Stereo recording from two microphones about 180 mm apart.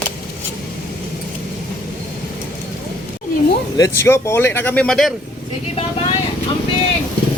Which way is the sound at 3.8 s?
15° left (ahead or behind).